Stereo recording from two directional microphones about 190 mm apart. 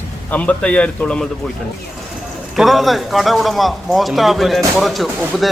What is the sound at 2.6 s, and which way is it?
A man's voice, centre (ahead or behind).